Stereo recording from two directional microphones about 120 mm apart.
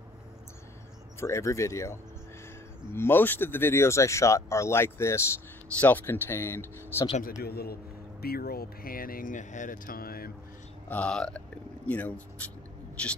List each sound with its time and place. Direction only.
1.2 s speech: 25° left (ahead or behind)
9.2 s speech: 90° left
10.9 s speech: 10° left (ahead or behind)